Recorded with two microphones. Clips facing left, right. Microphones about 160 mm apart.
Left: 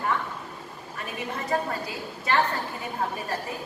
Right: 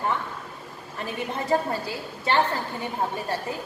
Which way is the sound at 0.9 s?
30° right (ahead or behind).